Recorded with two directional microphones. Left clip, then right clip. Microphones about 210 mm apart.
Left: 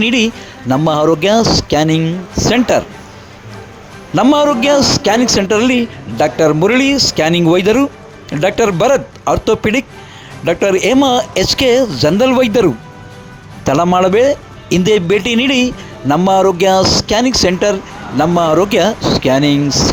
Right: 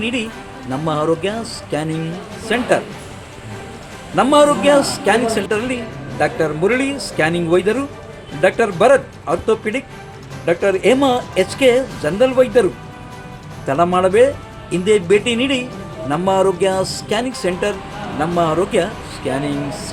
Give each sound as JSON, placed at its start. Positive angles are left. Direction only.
{"t": 0.0, "sound": "speech", "side_deg": 40}
{"t": 4.1, "sound": "speech", "side_deg": 40}
{"t": 13.7, "sound": "speech", "side_deg": 40}